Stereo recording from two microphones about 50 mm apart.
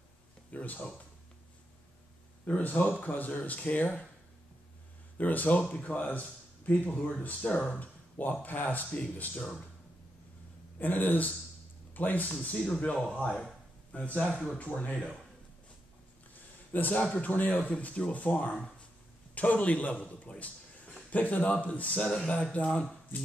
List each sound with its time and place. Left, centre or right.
0.5 s speech: left
2.4 s speech: left
5.1 s speech: left
10.8 s speech: left
12.4 s speech: left
14.1 s speech: centre
14.6 s speech: left
16.7 s a man's voice: left